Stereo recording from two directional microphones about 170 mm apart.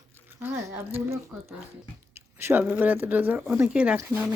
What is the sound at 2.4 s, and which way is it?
Speech, 15° right (ahead or behind).